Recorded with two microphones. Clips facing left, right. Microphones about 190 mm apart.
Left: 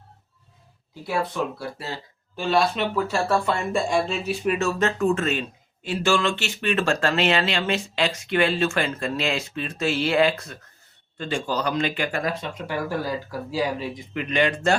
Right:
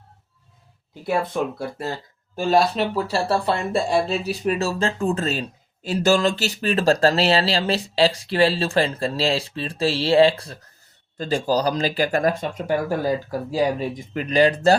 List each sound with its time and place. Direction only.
1.0 s speech: 45° right (ahead or behind)